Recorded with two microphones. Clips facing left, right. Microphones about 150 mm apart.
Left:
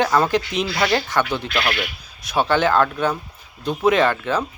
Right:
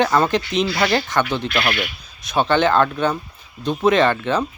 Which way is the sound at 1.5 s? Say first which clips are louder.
Even; 20° right (ahead or behind).